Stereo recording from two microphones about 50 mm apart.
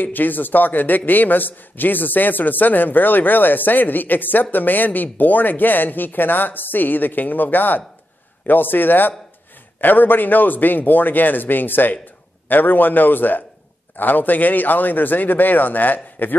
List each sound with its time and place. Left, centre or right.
0.0 s a man's voice: left